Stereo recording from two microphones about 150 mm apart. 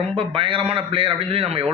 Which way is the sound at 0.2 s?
35° right (ahead or behind).